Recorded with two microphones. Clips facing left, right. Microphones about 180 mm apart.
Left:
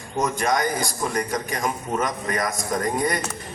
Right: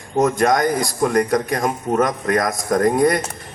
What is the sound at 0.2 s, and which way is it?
A man's voice, 55° right (ahead or behind).